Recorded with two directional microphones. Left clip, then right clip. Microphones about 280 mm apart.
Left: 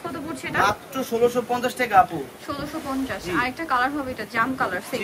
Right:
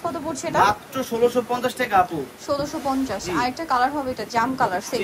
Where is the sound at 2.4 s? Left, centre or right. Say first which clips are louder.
Right 9 dB; centre.